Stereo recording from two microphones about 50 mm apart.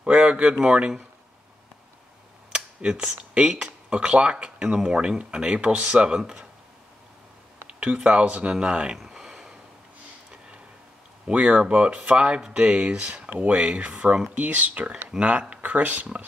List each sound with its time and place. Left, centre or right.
0.0 s speech: right
2.5 s a sound: centre
3.2 s speech: right
7.6 s speech: right
11.2 s speech: right